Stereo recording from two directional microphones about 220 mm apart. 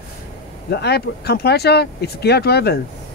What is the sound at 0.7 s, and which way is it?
Speech, 50° left (ahead or behind).